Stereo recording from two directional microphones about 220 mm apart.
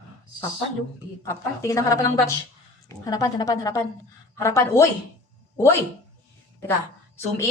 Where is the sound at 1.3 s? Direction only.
15° left (ahead or behind).